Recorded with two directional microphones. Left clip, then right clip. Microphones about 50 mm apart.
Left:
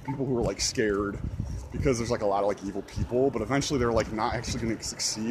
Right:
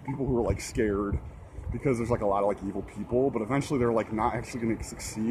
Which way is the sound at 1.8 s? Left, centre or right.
Centre.